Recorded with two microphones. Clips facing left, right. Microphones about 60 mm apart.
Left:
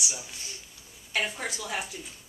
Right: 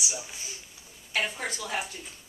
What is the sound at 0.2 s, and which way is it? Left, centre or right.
Speech, centre.